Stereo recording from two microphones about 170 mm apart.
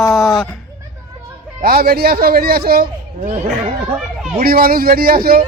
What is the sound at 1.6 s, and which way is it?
A man's voice, 60° right (ahead or behind).